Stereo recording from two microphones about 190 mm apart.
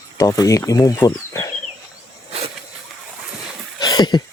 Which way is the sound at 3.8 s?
20° left (ahead or behind).